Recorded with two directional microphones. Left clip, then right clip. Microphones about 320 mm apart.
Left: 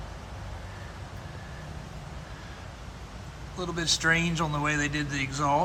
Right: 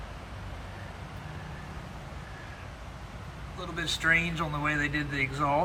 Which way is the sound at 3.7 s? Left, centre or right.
Centre.